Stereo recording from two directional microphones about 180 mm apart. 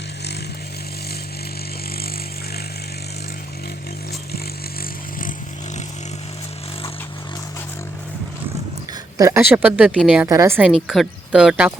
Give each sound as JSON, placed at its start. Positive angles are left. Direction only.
{"t": 9.1, "sound": "speech", "side_deg": -15}
{"t": 10.2, "sound": "speech", "side_deg": -15}
{"t": 10.8, "sound": "speech", "side_deg": 0}